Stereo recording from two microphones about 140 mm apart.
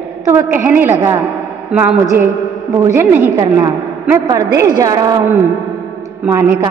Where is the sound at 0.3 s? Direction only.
15° right (ahead or behind).